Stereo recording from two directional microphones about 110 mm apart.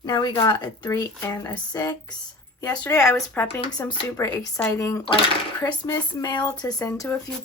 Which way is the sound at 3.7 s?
45° left (ahead or behind).